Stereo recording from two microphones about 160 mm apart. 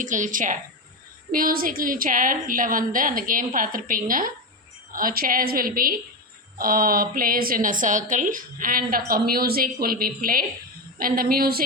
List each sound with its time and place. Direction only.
0.0 s a woman's voice: 50° right (ahead or behind); by 11.6 s 70° right (ahead or behind)